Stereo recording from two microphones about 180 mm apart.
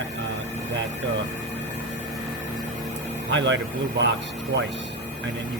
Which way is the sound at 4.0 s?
75° right (ahead or behind).